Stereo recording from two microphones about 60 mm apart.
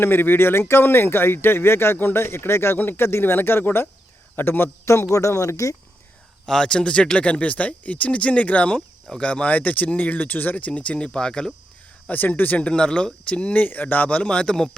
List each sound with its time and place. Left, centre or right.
0.0 s speech: left
5.1 s speech: left
6.4 s speech: centre
12.0 s speech: left; by 14.8 s centre